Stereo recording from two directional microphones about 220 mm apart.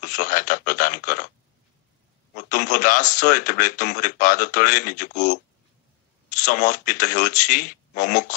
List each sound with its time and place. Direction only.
0.0 s a man's voice: 35° left (ahead or behind)
2.3 s a man's voice: 35° left (ahead or behind)
6.4 s a man's voice: 35° left (ahead or behind)